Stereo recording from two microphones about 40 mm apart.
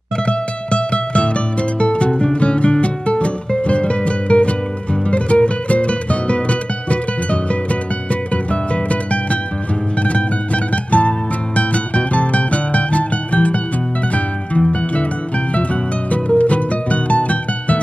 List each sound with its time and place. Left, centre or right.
0.3 s music: left
14.7 s music: left